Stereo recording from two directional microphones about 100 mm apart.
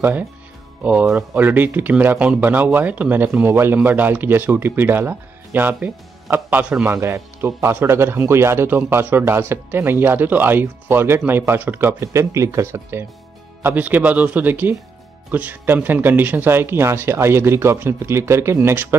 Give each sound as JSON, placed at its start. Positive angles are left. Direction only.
{"t": 0.0, "sound": "speech", "side_deg": -20}
{"t": 1.3, "sound": "a man's voice", "side_deg": -20}
{"t": 12.0, "sound": "speech", "side_deg": -30}